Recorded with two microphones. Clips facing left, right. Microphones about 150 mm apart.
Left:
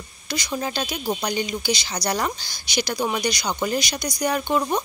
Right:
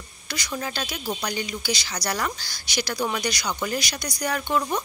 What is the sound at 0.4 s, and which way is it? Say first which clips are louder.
Speech: left 3 dB; 20° left (ahead or behind).